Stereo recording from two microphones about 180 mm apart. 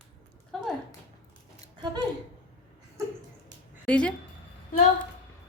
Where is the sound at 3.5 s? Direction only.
5° left (ahead or behind).